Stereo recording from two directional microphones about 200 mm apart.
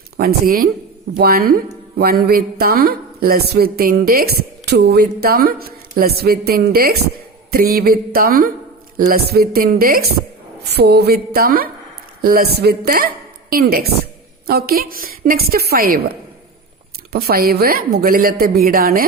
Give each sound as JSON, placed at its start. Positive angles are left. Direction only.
{"t": 0.2, "sound": "a woman's voice", "side_deg": -50}
{"t": 17.1, "sound": "speech", "side_deg": -50}